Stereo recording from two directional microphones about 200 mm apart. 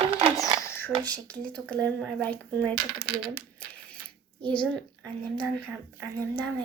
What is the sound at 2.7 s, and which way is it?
Speech, 50° right (ahead or behind).